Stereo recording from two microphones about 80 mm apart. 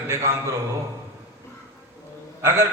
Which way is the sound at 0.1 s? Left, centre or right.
Right.